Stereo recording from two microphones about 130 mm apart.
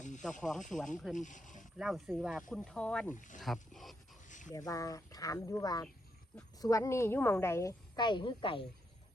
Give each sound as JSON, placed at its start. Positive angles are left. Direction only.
{"t": 0.2, "sound": "speech", "side_deg": 0}
{"t": 1.1, "sound": "speech", "side_deg": 75}
{"t": 1.8, "sound": "speech", "side_deg": -5}
{"t": 3.2, "sound": "speech", "side_deg": 75}
{"t": 3.4, "sound": "speech", "side_deg": 0}
{"t": 4.3, "sound": "dog", "side_deg": 75}
{"t": 4.5, "sound": "a woman's voice", "side_deg": 25}